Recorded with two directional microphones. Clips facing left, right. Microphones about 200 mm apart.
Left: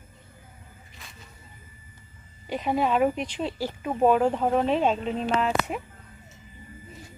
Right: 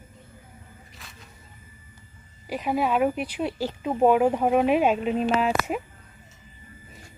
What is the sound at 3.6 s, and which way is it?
Speech, 15° right (ahead or behind).